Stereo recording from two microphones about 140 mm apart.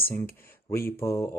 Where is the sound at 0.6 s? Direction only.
20° left (ahead or behind).